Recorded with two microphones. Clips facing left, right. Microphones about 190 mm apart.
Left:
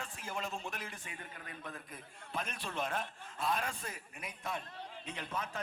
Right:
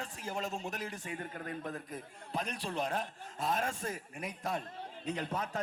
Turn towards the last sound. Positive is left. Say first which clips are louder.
# right 5 dB
turn(degrees=-35)  # may be behind; listen again after turning